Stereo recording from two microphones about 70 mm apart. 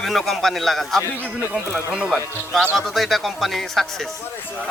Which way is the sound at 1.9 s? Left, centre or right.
Centre.